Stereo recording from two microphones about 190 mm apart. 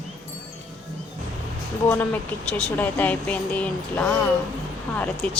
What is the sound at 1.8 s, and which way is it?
A woman's voice, 10° left (ahead or behind).